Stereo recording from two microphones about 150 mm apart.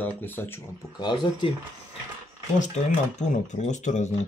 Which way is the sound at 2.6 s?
50° left (ahead or behind).